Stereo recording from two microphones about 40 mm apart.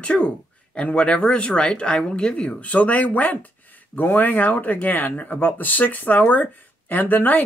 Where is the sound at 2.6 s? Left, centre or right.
Left.